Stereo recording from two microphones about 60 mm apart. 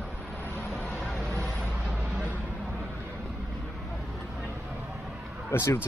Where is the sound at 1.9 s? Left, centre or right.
Right.